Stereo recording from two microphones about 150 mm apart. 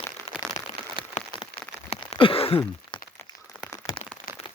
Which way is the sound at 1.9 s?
40° left (ahead or behind).